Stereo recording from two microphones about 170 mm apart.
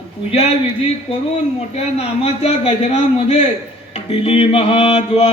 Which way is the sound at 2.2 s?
40° left (ahead or behind).